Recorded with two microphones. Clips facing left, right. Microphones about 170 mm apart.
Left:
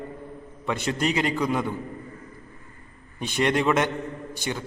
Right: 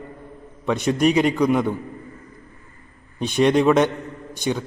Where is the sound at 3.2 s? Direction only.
20° right (ahead or behind).